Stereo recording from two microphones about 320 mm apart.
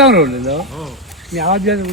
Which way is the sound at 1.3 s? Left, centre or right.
Right.